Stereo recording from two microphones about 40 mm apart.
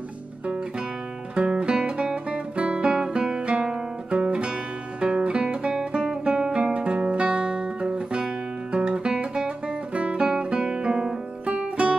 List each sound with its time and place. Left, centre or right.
1.3 s guitar: right
4.1 s music: right
5.7 s guitar: centre
6.8 s guitar: right
11.4 s music: right